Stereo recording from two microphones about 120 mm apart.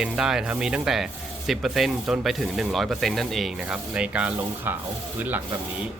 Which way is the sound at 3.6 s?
10° right (ahead or behind).